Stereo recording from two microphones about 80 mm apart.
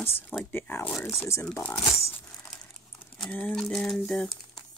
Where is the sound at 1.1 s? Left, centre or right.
Left.